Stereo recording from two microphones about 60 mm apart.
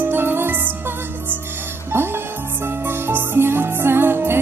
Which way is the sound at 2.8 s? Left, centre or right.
Right.